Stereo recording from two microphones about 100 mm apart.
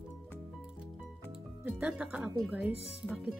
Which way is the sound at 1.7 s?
10° right (ahead or behind).